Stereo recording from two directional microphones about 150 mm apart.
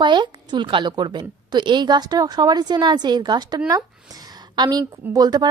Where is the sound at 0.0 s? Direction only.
30° right (ahead or behind).